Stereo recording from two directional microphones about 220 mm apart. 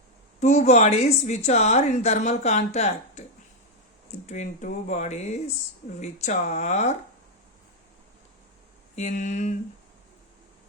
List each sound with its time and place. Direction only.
0.3 s a woman's voice: 30° left (ahead or behind)
4.3 s a woman's voice: 30° left (ahead or behind)
9.0 s a woman's voice: 35° left (ahead or behind)